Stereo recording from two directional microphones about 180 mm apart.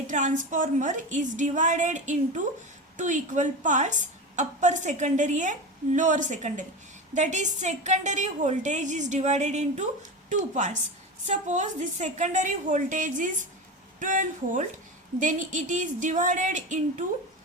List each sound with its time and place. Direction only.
0.1 s a woman's voice: 45° right (ahead or behind)